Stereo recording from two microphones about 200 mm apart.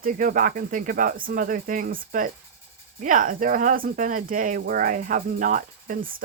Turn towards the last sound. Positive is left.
turn(degrees=-45)  # may be behind; listen again after turning